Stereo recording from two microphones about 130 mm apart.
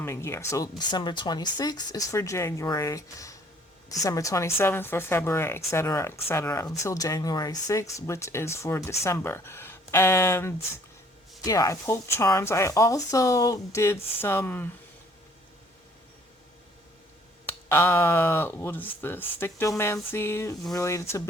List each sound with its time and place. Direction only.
0.0 s speech: 20° left (ahead or behind)
0.8 s speech: 35° left (ahead or behind); by 14.7 s 15° left (ahead or behind)
17.4 s speech: 20° left (ahead or behind)